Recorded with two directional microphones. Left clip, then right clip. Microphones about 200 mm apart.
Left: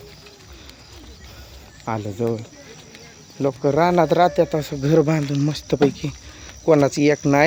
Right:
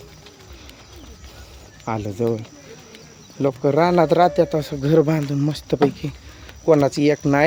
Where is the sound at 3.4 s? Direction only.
Centre (ahead or behind); by 7.4 s 15° left (ahead or behind).